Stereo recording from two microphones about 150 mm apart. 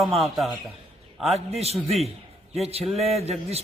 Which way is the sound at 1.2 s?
45° right (ahead or behind).